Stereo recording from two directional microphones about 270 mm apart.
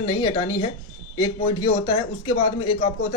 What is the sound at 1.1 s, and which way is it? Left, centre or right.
A man's voice, centre.